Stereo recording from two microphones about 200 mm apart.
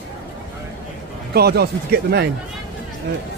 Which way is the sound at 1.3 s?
50° right (ahead or behind).